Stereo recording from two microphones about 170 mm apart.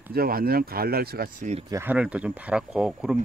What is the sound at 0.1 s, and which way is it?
Speech, 60° right (ahead or behind).